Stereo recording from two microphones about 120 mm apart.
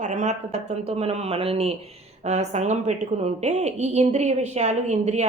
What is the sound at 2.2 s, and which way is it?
A woman's voice, 70° right (ahead or behind).